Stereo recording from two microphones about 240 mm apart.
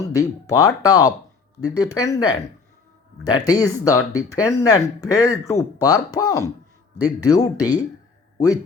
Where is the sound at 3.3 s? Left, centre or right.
Centre.